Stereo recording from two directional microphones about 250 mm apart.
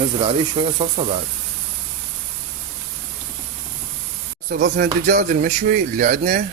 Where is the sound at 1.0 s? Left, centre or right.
Right.